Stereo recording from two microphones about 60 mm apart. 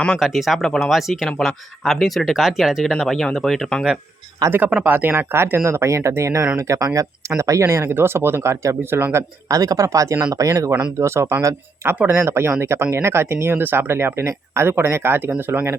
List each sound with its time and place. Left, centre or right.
0.2 s speech: centre
4.4 s speech: right
4.8 s speech: right
6.6 s speech: right
7.3 s speech: right
9.5 s speech: right
11.0 s speech: right